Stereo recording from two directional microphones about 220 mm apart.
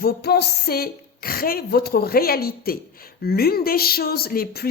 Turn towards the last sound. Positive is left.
turn(degrees=40)  # may be behind; listen again after turning